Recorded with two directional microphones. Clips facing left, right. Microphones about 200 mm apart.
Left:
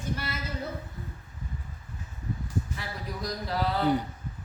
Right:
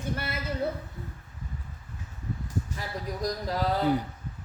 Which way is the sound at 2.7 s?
45° right (ahead or behind).